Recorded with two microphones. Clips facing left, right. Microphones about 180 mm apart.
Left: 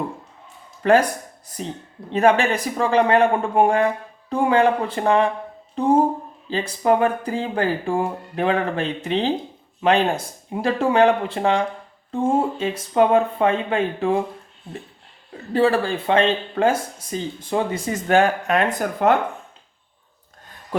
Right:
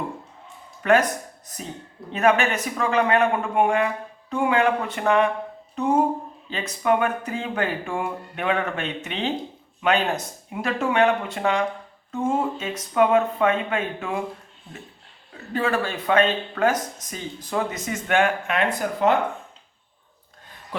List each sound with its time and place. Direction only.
0.8 s speech: 30° left (ahead or behind)
2.1 s speech: 30° left (ahead or behind)
15.5 s speech: 30° left (ahead or behind); by 19.1 s 50° left (ahead or behind)